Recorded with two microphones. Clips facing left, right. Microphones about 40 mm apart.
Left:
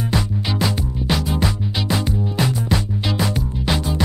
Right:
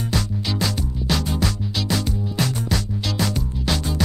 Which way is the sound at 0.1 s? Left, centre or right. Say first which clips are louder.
Left 3 dB; centre.